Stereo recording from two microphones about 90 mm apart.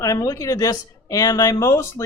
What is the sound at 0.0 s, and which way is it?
A man's voice, 40° left (ahead or behind).